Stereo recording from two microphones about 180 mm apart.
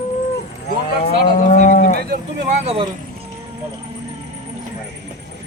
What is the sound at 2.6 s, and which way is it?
Speech, 35° right (ahead or behind).